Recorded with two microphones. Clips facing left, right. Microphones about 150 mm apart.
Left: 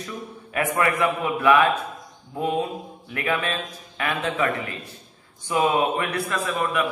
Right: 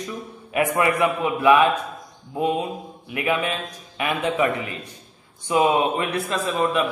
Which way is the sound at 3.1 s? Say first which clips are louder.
Right 2 dB; 15° right (ahead or behind).